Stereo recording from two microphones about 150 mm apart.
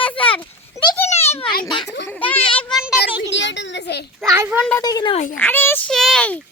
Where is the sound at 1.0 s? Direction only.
45° left (ahead or behind).